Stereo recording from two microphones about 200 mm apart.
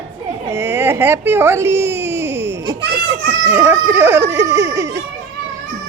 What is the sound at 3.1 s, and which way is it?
Music, 10° right (ahead or behind).